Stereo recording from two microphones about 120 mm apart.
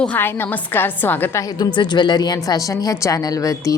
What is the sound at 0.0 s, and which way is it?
A woman's voice, 15° left (ahead or behind).